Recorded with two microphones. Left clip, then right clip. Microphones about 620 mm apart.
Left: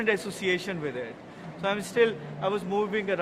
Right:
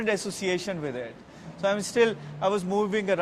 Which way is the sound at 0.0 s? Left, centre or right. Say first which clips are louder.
Left 1 dB; right.